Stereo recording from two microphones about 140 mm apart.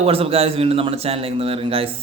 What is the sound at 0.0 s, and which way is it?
Speech, 45° right (ahead or behind).